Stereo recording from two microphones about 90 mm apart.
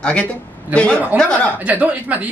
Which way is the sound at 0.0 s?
15° left (ahead or behind).